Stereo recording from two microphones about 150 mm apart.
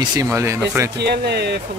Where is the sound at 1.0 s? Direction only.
90° right.